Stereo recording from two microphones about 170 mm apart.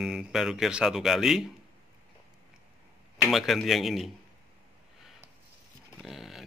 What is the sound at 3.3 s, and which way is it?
Speech, centre (ahead or behind).